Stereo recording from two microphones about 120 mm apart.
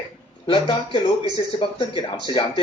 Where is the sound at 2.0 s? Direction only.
40° left (ahead or behind).